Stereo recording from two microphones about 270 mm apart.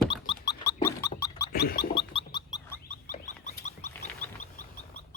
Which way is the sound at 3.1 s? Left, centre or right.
Left.